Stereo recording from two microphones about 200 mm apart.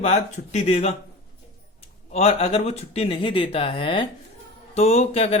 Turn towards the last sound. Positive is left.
turn(degrees=30)  # may be behind; listen again after turning